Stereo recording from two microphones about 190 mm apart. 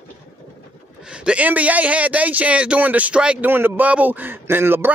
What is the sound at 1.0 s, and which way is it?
A man's voice, 5° right (ahead or behind).